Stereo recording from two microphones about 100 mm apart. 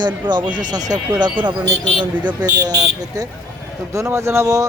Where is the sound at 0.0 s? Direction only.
50° right (ahead or behind).